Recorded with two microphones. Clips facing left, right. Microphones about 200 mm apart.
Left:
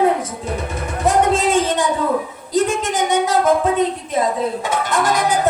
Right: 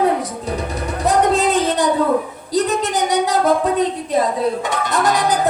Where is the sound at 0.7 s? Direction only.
35° right (ahead or behind).